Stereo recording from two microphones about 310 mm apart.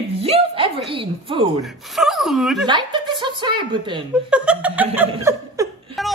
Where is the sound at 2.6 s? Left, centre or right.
Centre.